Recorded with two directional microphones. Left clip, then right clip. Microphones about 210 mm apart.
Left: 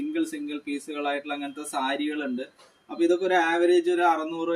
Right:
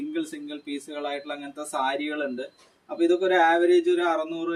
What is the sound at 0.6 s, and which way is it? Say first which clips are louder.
Speech: left 2 dB; 10° right (ahead or behind).